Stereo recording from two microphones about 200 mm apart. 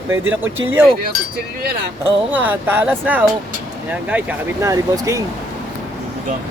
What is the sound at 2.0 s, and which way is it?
Speech, 10° right (ahead or behind).